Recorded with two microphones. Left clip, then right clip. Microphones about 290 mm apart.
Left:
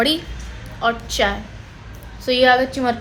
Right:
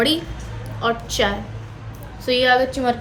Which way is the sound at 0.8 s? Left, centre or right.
Centre.